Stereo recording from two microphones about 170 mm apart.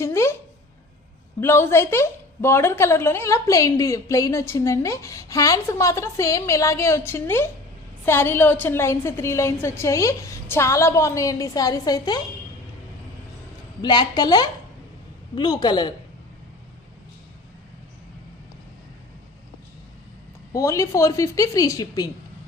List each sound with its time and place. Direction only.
0.0 s a sound: 15° left (ahead or behind)
1.4 s a woman's voice: 15° left (ahead or behind)
13.8 s a woman's voice: 25° left (ahead or behind)
20.5 s a woman's voice: 20° left (ahead or behind)